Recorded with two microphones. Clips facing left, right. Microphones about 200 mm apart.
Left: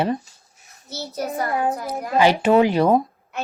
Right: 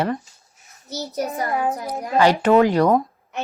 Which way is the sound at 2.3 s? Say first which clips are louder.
Right 1 dB; 10° left (ahead or behind).